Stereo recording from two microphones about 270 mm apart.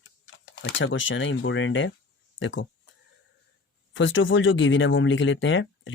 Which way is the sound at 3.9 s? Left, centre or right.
Left.